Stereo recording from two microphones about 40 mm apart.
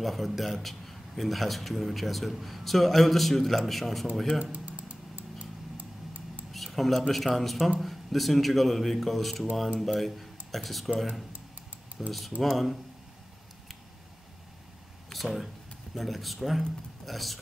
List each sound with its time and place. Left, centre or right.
0.0 s a man's voice: centre
4.4 s typing: right
6.5 s a man's voice: centre
12.0 s a man's voice: centre
15.1 s speech: centre